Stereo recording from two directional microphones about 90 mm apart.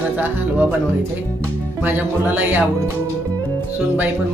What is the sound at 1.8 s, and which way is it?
Speech, 20° right (ahead or behind).